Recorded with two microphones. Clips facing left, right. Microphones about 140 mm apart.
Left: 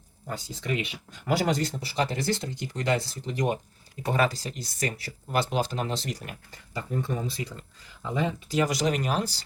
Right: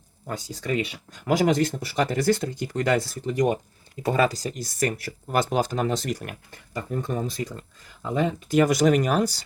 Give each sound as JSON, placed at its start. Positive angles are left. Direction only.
{"t": 0.3, "sound": "speech", "side_deg": -45}